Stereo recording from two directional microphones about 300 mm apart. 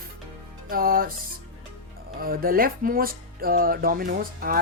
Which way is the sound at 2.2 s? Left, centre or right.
Right.